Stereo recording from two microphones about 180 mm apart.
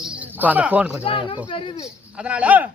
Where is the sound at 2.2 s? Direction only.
5° right (ahead or behind).